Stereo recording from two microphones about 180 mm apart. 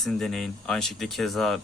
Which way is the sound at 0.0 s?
Centre (ahead or behind).